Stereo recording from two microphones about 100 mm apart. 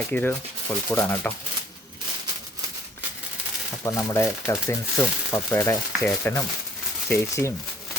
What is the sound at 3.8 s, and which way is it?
Speech, 30° left (ahead or behind).